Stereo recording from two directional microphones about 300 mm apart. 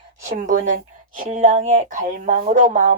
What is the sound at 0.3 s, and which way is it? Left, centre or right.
A woman's voice, right.